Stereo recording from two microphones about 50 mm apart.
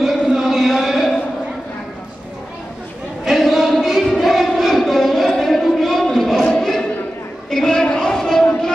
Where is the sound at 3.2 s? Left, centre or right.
Centre.